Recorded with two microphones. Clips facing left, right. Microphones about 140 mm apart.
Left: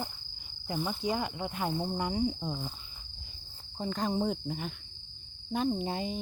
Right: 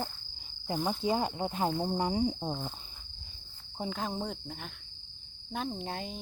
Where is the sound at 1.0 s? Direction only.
30° right (ahead or behind).